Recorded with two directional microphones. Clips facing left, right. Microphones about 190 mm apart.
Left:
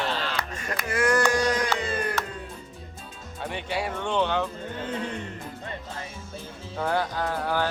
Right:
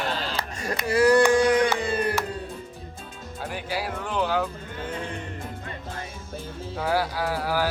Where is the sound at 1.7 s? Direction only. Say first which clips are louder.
Right 3 dB; 30° right (ahead or behind).